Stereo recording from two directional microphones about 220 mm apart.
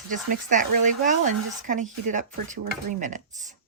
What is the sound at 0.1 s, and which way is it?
A woman's voice, 35° right (ahead or behind).